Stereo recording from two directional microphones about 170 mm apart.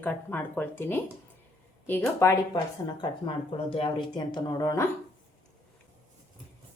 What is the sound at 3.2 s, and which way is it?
Speech, 30° left (ahead or behind).